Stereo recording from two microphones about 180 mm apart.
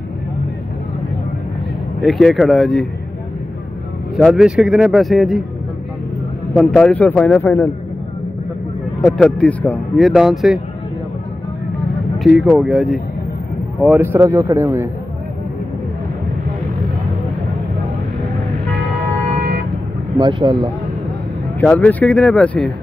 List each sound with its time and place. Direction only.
2.0 s speech: centre (ahead or behind)
4.2 s speech: 5° right (ahead or behind)
6.5 s a man's voice: 5° left (ahead or behind)
9.2 s speech: 5° left (ahead or behind)
12.4 s speech: centre (ahead or behind)
13.8 s speech: 10° right (ahead or behind)
20.2 s speech: 25° right (ahead or behind)
21.5 s a man's voice: 10° left (ahead or behind)